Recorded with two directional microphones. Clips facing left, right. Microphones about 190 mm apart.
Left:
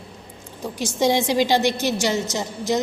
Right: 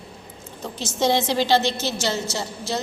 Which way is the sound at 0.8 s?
15° left (ahead or behind).